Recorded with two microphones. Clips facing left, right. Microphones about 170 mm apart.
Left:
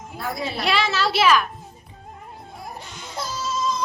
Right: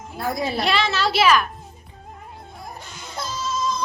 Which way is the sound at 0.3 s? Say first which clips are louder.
Right 5 dB; 40° right (ahead or behind).